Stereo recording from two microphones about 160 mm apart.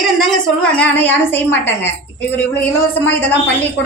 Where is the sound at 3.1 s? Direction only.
10° left (ahead or behind).